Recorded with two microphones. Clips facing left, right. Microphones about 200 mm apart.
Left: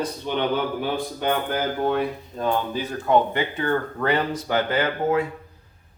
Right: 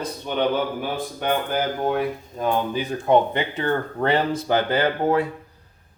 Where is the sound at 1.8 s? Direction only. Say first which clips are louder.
Even; 15° right (ahead or behind).